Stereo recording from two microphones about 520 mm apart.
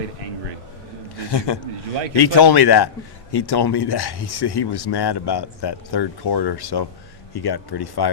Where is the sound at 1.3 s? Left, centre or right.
Left.